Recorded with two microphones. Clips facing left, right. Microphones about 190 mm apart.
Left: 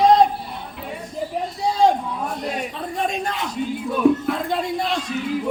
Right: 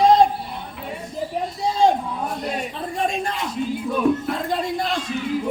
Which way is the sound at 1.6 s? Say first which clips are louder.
Left 1 dB; centre (ahead or behind).